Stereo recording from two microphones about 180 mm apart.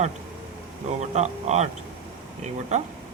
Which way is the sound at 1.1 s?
40° right (ahead or behind).